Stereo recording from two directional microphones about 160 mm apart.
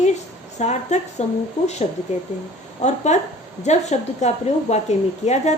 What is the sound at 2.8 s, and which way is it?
A woman's voice, 45° left (ahead or behind).